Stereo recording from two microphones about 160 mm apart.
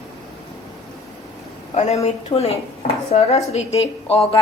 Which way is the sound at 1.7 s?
45° left (ahead or behind).